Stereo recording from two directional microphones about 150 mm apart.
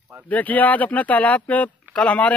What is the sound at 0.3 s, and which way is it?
Speech, 10° left (ahead or behind).